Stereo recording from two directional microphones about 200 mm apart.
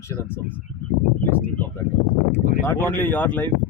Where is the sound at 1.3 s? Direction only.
10° left (ahead or behind).